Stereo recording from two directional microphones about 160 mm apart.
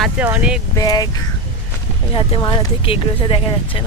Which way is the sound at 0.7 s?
25° left (ahead or behind).